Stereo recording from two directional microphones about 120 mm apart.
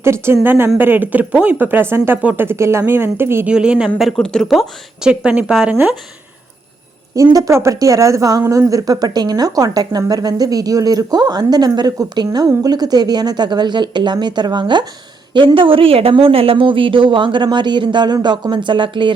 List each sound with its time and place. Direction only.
0.0 s speech: 20° right (ahead or behind)
3.5 s speech: 10° right (ahead or behind)
5.0 s speech: 10° right (ahead or behind)
7.3 s speech: 25° right (ahead or behind); by 19.1 s 40° right (ahead or behind)